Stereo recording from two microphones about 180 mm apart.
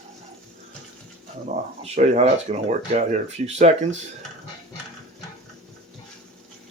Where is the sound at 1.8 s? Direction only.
40° right (ahead or behind).